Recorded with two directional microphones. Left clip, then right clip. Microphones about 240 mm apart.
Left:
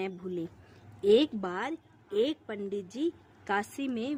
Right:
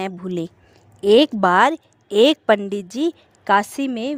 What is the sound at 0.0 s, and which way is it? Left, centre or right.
Speech, right.